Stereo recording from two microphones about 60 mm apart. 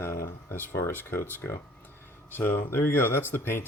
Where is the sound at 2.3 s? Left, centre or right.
Left.